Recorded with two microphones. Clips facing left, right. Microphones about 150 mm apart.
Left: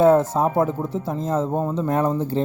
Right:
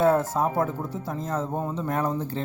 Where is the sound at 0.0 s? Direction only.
20° left (ahead or behind).